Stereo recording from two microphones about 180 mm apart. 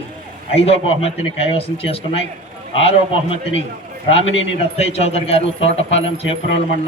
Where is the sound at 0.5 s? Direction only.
35° left (ahead or behind).